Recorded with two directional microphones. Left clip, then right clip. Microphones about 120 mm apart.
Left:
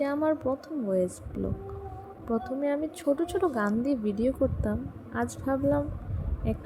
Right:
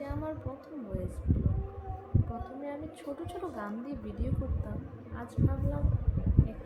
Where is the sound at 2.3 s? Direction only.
75° left (ahead or behind).